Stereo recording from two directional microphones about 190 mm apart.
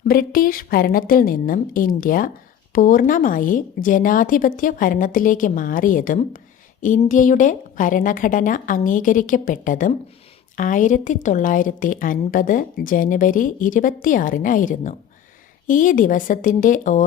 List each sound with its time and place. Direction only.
0.1 s a woman's voice: 50° left (ahead or behind)